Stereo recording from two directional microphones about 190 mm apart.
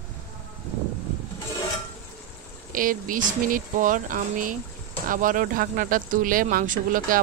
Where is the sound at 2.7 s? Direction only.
45° right (ahead or behind).